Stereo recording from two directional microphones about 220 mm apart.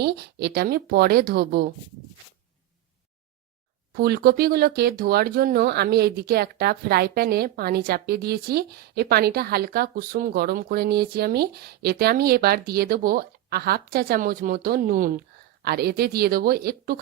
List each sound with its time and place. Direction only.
0.0 s speech: 50° right (ahead or behind)
3.9 s speech: 45° right (ahead or behind)